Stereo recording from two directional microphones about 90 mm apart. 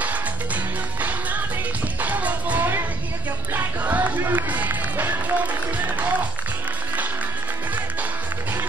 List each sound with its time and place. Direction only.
2.0 s music: 15° right (ahead or behind)